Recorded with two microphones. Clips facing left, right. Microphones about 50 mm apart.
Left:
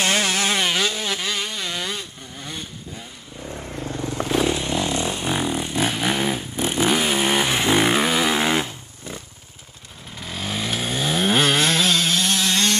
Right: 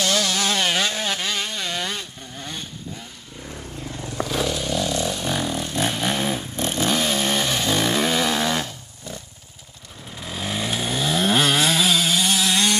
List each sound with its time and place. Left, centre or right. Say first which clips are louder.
0.0 s a sound: left 1 dB; left
1.0 s vehicle: even; centre
4.1 s vehicle: left 3 dB; left
5.9 s vehicle: left 1 dB; centre; by 9.2 s left
10.2 s chainsaw: even; centre